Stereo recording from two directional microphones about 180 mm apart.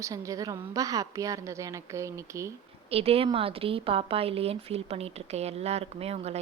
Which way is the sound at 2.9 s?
35° right (ahead or behind).